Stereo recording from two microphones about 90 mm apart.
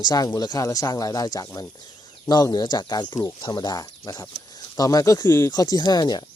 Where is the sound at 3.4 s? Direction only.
50° left (ahead or behind).